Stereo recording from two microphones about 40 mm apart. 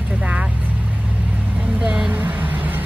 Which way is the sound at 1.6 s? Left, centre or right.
Right.